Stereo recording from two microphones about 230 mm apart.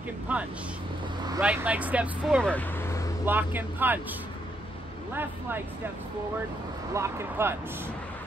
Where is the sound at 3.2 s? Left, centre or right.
Centre.